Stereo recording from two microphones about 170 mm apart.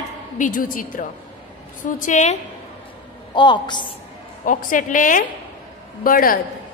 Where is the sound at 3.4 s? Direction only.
25° left (ahead or behind).